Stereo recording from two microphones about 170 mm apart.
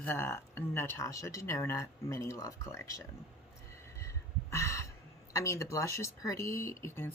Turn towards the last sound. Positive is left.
turn(degrees=15)  # may be behind; listen again after turning